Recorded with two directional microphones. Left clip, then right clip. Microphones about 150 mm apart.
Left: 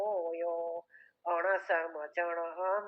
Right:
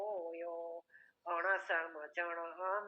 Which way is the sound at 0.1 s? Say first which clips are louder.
Left 8 dB; 35° left (ahead or behind).